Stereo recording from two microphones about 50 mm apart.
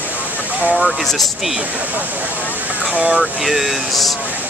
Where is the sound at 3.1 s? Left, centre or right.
Centre.